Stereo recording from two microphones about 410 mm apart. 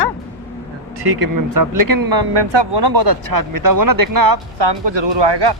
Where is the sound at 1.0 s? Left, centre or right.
Right.